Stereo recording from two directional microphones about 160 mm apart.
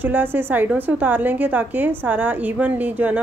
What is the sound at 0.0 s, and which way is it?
A woman's voice, 10° right (ahead or behind).